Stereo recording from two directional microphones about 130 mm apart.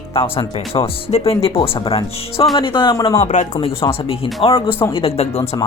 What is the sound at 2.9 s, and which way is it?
Speech, 25° left (ahead or behind).